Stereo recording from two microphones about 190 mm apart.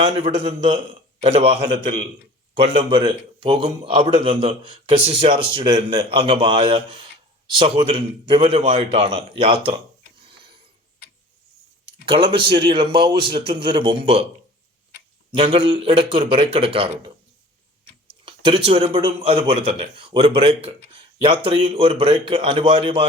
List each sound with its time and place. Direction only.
0.0 s a man's voice: 30° right (ahead or behind)
12.0 s a man's voice: 25° right (ahead or behind)
15.3 s a man's voice: 30° right (ahead or behind)
18.3 s a man's voice: 30° right (ahead or behind)